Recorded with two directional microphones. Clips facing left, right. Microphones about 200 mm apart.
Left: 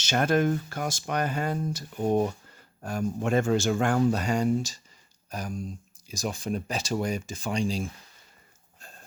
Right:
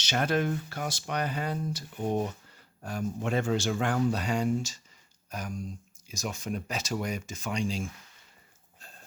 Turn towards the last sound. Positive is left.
turn(degrees=35)  # may be behind; listen again after turning